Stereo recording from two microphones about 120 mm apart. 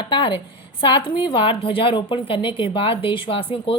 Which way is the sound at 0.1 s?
40° left (ahead or behind).